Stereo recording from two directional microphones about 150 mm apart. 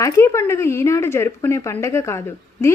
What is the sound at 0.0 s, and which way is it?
A woman's voice, 20° left (ahead or behind).